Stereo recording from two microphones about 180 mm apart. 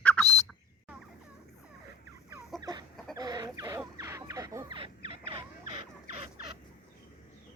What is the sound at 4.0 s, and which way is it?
Fowl, 15° right (ahead or behind).